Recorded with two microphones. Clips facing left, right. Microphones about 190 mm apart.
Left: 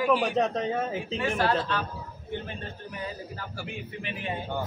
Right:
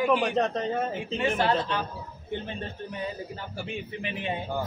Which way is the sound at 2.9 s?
20° right (ahead or behind).